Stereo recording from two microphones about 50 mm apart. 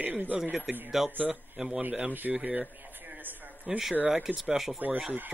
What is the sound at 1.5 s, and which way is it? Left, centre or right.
Speech, centre.